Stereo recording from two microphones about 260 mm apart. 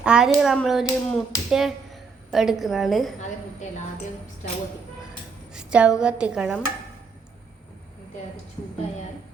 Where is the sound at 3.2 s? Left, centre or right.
Left.